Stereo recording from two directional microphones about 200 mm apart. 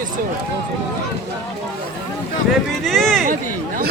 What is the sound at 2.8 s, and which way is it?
Speech, centre (ahead or behind).